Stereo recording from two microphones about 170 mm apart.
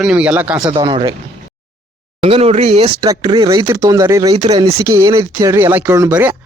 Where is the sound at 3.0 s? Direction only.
25° right (ahead or behind).